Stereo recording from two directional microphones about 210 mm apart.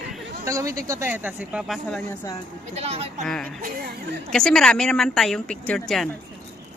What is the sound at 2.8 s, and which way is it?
Speech, 30° right (ahead or behind).